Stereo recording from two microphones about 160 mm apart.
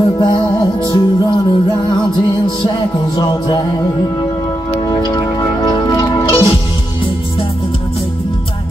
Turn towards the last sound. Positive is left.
turn(degrees=35)  # may be behind; listen again after turning